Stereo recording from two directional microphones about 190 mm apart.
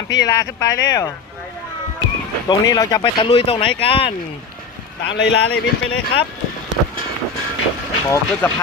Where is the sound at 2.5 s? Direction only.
20° left (ahead or behind).